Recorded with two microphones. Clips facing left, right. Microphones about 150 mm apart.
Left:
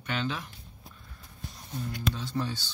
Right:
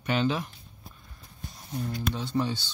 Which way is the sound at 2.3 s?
15° right (ahead or behind).